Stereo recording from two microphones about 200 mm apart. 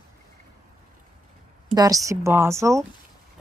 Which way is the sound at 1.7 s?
15° right (ahead or behind).